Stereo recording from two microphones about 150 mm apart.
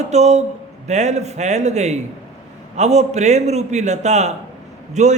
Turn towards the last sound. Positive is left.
turn(degrees=-50)  # may be behind; listen again after turning